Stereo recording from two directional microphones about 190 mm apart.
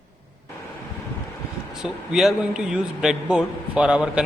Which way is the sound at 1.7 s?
Centre (ahead or behind).